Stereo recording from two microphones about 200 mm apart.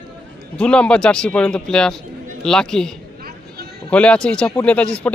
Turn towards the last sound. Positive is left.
turn(degrees=5)  # may be behind; listen again after turning